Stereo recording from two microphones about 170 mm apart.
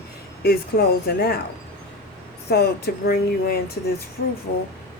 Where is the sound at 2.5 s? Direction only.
70° left (ahead or behind).